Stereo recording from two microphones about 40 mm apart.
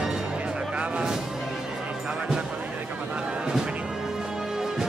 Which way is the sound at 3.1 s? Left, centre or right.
Right.